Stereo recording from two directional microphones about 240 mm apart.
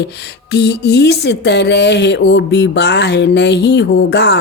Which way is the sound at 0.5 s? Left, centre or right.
Left.